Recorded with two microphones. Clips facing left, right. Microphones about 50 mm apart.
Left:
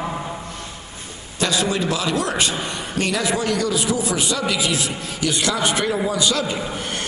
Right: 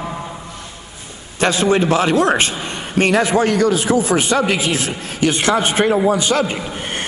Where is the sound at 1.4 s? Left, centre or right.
Right.